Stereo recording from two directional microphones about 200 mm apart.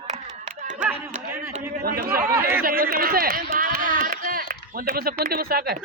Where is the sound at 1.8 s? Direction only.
50° right (ahead or behind).